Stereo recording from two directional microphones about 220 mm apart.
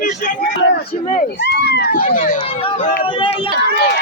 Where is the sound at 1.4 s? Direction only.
45° left (ahead or behind).